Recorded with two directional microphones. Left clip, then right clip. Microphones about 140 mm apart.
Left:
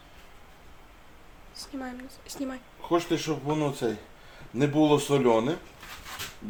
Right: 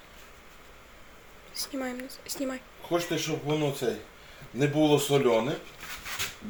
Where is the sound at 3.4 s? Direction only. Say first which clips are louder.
Even; 85° left.